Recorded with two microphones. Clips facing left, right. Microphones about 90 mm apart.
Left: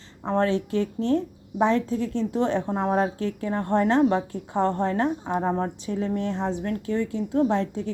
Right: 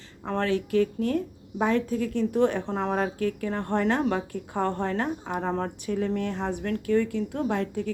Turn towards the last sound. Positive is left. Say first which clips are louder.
# left 4 dB
turn(degrees=30)  # may be behind; listen again after turning